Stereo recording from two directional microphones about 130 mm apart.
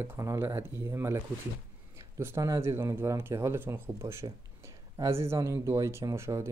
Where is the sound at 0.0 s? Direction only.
20° right (ahead or behind).